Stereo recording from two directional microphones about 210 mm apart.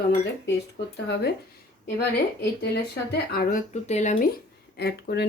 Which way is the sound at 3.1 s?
45° left (ahead or behind).